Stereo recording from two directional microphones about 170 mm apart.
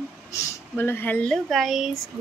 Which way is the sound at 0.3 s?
15° left (ahead or behind).